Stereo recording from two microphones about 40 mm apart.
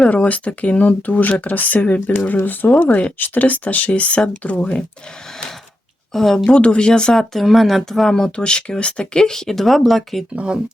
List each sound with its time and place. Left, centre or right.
0.1 s speech: left
1.2 s speech: left
6.1 s speech: centre
6.4 s speech: left
7.1 s speech: centre
8.0 s speech: centre
10.3 s speech: right